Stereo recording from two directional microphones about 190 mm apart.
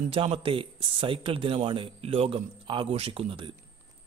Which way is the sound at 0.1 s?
30° right (ahead or behind).